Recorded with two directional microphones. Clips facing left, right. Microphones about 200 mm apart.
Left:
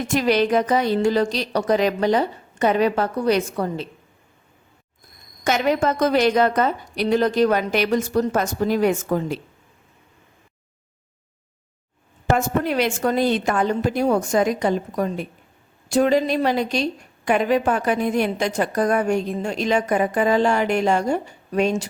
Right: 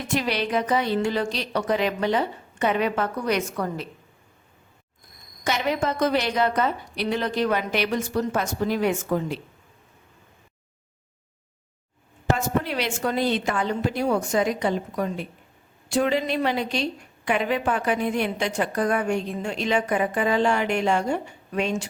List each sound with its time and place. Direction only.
0.1 s a woman's voice: 45° left (ahead or behind); by 3.8 s 30° left (ahead or behind)
5.5 s a woman's voice: 45° left (ahead or behind)
12.4 s a woman's voice: 50° left (ahead or behind)